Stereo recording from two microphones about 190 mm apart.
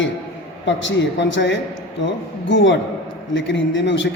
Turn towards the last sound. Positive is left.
turn(degrees=70)  # may be behind; listen again after turning